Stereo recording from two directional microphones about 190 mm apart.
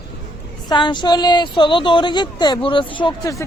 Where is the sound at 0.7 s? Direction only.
25° left (ahead or behind).